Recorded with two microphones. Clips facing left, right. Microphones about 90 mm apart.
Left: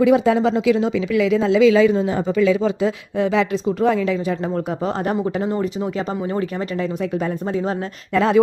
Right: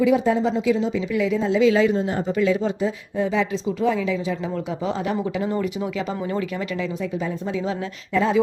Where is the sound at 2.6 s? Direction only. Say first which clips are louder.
Left 4 dB; 80° left; by 6.9 s 40° left (ahead or behind).